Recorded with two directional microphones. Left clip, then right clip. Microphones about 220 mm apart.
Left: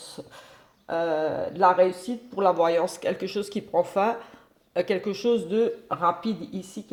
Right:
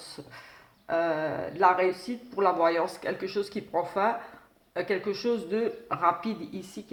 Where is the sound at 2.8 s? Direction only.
50° left (ahead or behind).